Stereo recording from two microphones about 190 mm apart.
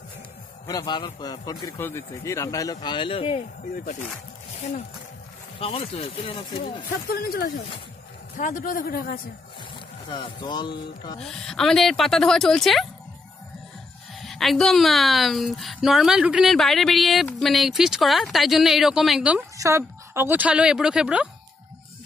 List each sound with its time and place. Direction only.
0.7 s a man's voice: 20° left (ahead or behind)
3.7 s a man's voice: 45° left (ahead or behind)
5.6 s a man's voice: 30° left (ahead or behind)
7.1 s speech: 55° left (ahead or behind)
8.4 s a man's voice: 45° left (ahead or behind)
10.0 s a man's voice: 25° left (ahead or behind)
11.1 s a woman's voice: 5° left (ahead or behind)
14.1 s a woman's voice: centre (ahead or behind)
19.5 s a woman's voice: 15° right (ahead or behind)